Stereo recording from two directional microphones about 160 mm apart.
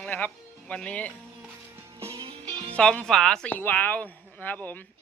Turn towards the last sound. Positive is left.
turn(degrees=10)  # may be behind; listen again after turning